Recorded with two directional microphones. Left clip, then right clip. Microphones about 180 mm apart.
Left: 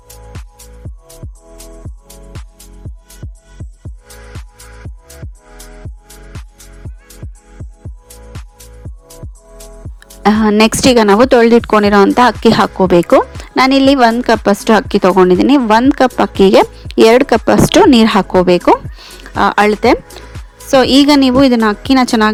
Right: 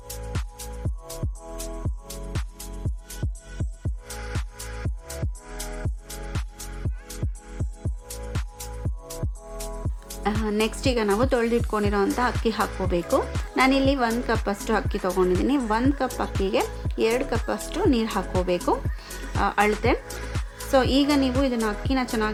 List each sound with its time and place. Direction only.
0.3 s music: 5° right (ahead or behind)
3.6 s music: centre (ahead or behind)
10.2 s a woman's voice: 50° left (ahead or behind)